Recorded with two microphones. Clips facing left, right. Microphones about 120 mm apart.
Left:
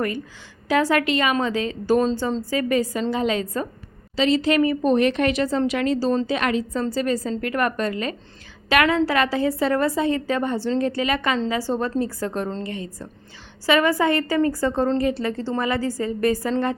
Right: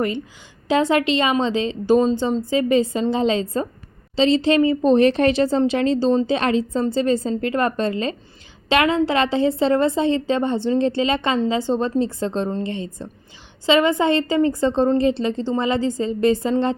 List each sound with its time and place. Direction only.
0.7 s speech: 20° right (ahead or behind)